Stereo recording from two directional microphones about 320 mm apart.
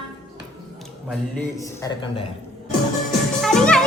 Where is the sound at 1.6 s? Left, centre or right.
Centre.